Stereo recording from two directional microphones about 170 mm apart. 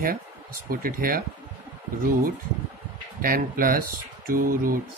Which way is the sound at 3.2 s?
55° right (ahead or behind).